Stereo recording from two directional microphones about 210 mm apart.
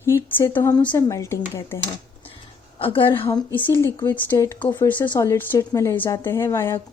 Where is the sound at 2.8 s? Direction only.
25° left (ahead or behind).